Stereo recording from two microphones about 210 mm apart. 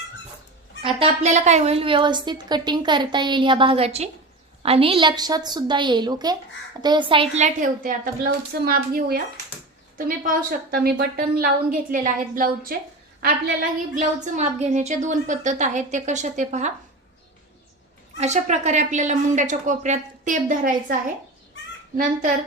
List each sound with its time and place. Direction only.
0.8 s a woman's voice: 25° right (ahead or behind); by 12.7 s 40° right (ahead or behind)
14.3 s speech: 35° right (ahead or behind)
18.2 s speech: 35° right (ahead or behind)